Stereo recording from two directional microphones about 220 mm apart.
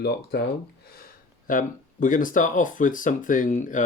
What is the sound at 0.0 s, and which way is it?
Speech, 45° left (ahead or behind).